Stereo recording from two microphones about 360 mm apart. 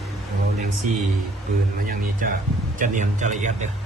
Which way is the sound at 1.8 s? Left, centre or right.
Right.